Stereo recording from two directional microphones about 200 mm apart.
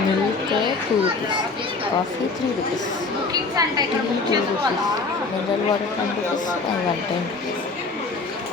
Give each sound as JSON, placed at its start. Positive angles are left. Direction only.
{"t": 3.5, "sound": "a woman's voice", "side_deg": -20}